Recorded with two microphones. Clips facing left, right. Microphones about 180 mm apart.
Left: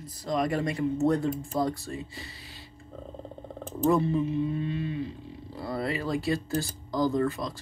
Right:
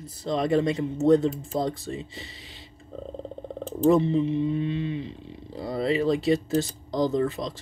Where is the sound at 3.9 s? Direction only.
20° right (ahead or behind).